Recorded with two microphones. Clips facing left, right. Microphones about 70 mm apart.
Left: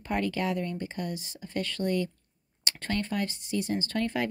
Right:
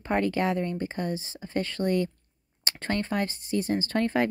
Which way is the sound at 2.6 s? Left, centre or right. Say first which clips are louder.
Right 2 dB; right.